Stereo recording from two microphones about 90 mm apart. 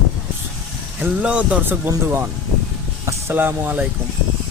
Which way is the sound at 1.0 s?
15° right (ahead or behind).